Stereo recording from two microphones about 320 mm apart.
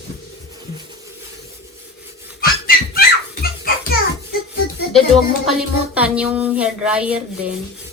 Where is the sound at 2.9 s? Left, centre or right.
Left.